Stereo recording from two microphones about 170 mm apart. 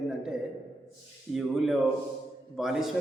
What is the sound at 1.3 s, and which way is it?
A man's voice, centre (ahead or behind).